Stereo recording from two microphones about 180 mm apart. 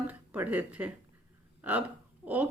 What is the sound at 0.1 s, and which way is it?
Speech, 10° right (ahead or behind).